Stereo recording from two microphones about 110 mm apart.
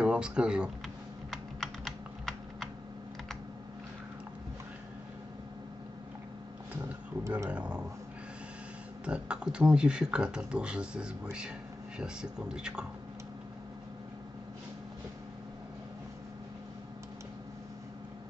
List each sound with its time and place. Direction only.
0.0 s speech: 10° right (ahead or behind)
1.3 s typing: centre (ahead or behind)
6.8 s a sound: 30° right (ahead or behind)
7.4 s speech: 10° right (ahead or behind)
9.0 s speech: 10° right (ahead or behind)